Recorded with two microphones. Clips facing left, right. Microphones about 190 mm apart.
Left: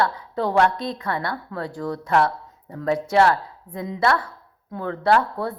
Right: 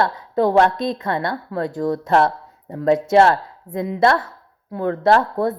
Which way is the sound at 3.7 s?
40° right (ahead or behind).